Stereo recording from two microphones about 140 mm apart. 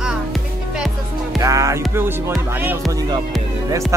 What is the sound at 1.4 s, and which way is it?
Music, 25° right (ahead or behind).